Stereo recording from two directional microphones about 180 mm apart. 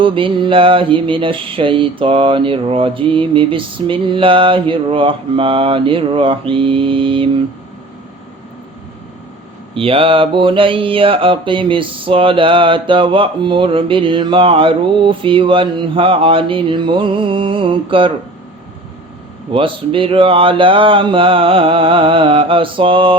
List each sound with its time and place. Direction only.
0.0 s mantra: 30° right (ahead or behind)
9.7 s mantra: 30° right (ahead or behind)
19.5 s mantra: 30° right (ahead or behind)